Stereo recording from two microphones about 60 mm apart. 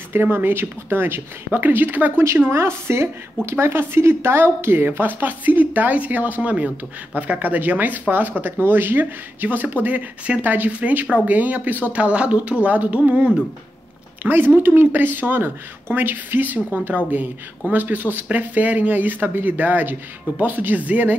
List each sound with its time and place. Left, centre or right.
0.1 s speech: right
2.2 s a woman's voice: right
14.2 s speech: right